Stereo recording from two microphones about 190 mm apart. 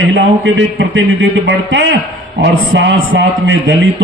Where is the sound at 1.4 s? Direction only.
70° right (ahead or behind).